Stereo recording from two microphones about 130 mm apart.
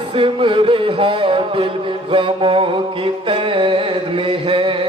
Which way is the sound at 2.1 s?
40° right (ahead or behind).